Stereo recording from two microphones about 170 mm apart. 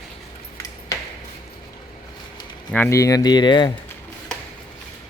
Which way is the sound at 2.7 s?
15° left (ahead or behind).